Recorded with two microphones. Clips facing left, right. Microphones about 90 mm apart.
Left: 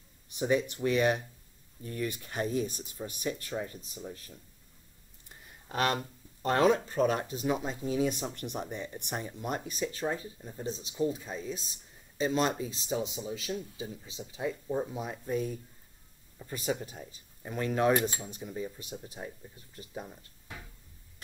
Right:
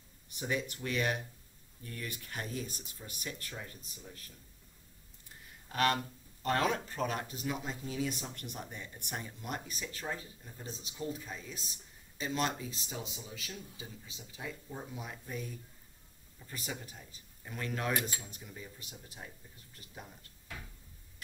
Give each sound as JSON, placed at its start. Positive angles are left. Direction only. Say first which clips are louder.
{"t": 0.4, "sound": "speech", "louder": "left 8 dB", "side_deg": 25}
{"t": 5.7, "sound": "speech", "louder": "left 1 dB", "side_deg": 20}